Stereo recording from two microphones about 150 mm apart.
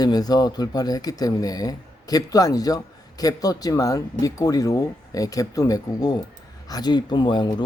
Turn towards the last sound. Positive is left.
turn(degrees=30)  # may be behind; listen again after turning